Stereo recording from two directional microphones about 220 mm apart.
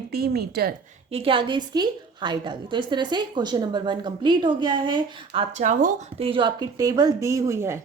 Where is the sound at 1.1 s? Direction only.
25° right (ahead or behind).